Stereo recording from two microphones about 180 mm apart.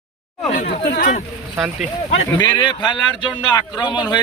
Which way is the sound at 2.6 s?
25° left (ahead or behind).